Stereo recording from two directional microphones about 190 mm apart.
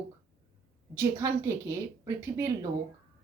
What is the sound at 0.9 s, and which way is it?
Speech, 15° right (ahead or behind).